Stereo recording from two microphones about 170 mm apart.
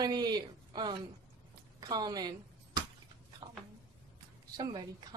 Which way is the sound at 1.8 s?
20° right (ahead or behind).